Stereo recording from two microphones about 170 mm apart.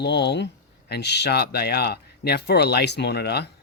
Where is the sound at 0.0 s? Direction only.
85° left.